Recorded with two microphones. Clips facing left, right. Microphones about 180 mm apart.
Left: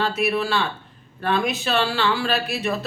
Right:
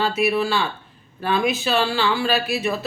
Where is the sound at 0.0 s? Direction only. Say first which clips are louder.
Right 2 dB; centre (ahead or behind).